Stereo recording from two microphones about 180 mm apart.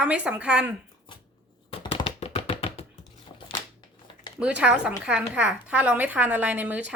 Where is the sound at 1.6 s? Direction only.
30° left (ahead or behind).